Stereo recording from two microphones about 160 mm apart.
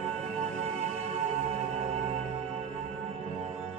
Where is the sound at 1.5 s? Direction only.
45° right (ahead or behind).